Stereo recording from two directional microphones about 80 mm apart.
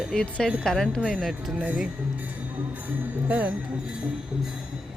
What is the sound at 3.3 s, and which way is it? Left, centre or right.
Music, centre.